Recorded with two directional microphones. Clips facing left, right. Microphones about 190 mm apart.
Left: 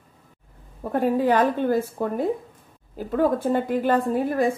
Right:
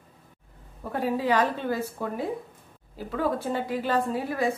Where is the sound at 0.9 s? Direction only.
50° left (ahead or behind).